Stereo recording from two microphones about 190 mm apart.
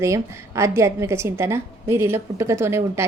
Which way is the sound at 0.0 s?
15° right (ahead or behind).